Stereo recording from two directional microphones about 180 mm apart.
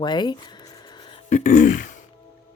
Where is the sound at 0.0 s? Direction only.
25° left (ahead or behind).